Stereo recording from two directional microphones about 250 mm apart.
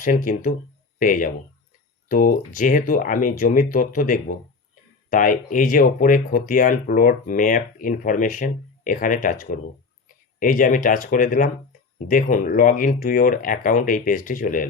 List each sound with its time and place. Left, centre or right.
0.0 s speech: left